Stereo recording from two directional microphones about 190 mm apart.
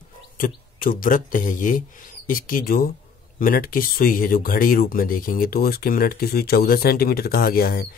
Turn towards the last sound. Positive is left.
turn(degrees=50)  # may be behind; listen again after turning